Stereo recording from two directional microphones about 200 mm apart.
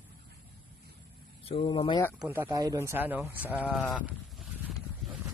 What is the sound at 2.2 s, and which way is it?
Speech, 10° right (ahead or behind).